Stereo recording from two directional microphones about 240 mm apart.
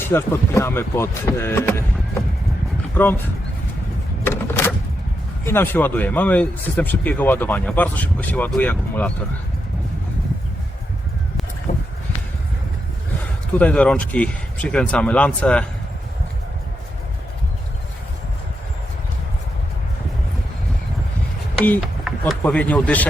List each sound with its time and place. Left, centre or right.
0.0 s speech: centre
2.9 s speech: centre
4.2 s a sound: centre
5.5 s speech: centre
11.7 s a sound: left
13.5 s speech: centre
21.6 s speech: centre